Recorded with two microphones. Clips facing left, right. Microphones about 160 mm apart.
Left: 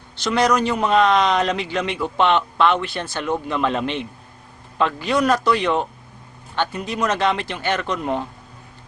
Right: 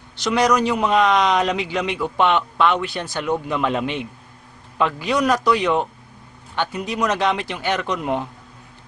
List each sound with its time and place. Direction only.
0.2 s a man's voice: 15° right (ahead or behind)